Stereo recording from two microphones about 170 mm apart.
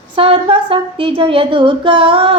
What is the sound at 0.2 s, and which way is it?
Speech, 30° right (ahead or behind).